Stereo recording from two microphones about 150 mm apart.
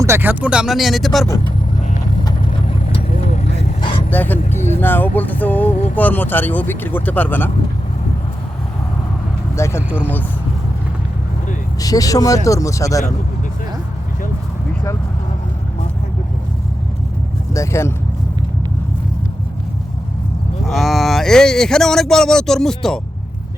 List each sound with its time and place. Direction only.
0.0 s speech: 15° right (ahead or behind); by 1.3 s centre (ahead or behind)
2.6 s vehicle: 50° left (ahead or behind)
4.1 s speech: 10° left (ahead or behind)
4.5 s speech: 50° left (ahead or behind)
4.8 s speech: 15° left (ahead or behind)
9.6 s speech: 20° left (ahead or behind)
11.8 s speech: 25° left (ahead or behind)
17.5 s speech: 20° left (ahead or behind)
20.7 s speech: centre (ahead or behind)